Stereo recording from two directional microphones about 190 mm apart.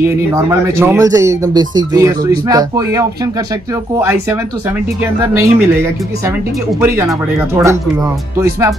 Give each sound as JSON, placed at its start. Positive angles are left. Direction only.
{"t": 0.0, "sound": "speech", "side_deg": -15}
{"t": 5.4, "sound": "speech", "side_deg": -15}